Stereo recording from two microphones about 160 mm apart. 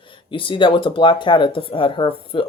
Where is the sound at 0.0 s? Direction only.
30° left (ahead or behind).